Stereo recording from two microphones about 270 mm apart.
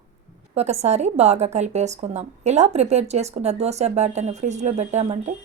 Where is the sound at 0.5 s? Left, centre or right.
Right.